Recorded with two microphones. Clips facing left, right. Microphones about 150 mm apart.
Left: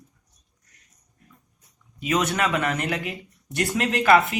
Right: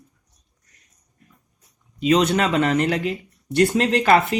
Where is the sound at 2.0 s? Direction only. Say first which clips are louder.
Right 6 dB; 25° right (ahead or behind).